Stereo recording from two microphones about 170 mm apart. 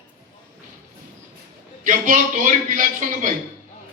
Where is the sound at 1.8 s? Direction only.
50° right (ahead or behind).